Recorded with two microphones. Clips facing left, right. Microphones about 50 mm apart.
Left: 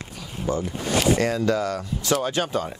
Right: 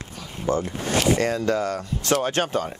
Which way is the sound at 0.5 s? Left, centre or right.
Right.